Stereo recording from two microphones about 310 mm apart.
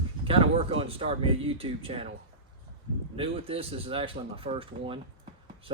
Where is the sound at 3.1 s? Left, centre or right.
Centre.